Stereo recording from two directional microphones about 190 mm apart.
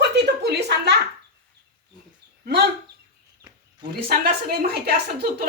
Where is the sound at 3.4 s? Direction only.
20° right (ahead or behind).